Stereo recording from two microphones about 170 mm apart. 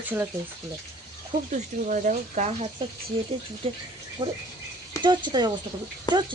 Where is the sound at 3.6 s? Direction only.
35° right (ahead or behind).